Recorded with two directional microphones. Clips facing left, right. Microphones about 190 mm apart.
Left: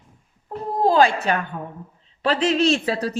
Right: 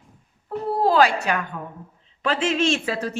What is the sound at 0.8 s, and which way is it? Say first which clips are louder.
Speech: left 2 dB; 25° left (ahead or behind).